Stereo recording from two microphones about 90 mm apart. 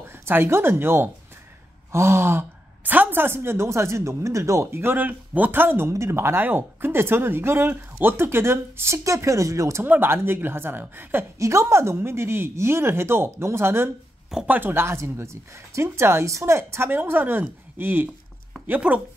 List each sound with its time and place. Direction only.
0.1 s a woman's voice: 30° right (ahead or behind)
9.8 s speech: 25° right (ahead or behind)